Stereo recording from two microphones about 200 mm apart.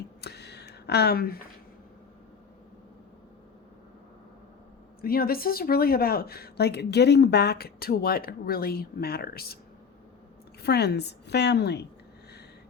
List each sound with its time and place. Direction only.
0.2 s a sound: 55° left (ahead or behind)
4.9 s a woman's voice: 50° left (ahead or behind)
10.6 s a woman's voice: 55° left (ahead or behind)